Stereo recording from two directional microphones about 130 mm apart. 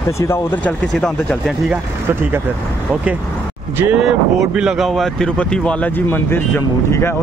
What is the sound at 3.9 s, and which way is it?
Speech, 5° right (ahead or behind).